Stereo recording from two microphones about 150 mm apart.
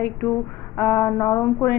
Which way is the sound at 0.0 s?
15° left (ahead or behind).